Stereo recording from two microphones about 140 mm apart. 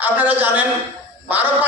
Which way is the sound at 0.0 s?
10° right (ahead or behind).